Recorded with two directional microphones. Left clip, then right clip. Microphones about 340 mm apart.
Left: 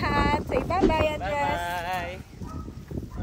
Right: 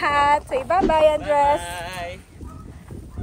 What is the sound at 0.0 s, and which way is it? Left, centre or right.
Speech, centre.